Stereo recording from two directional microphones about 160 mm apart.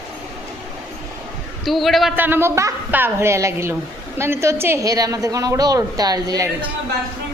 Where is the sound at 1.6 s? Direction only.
Centre (ahead or behind).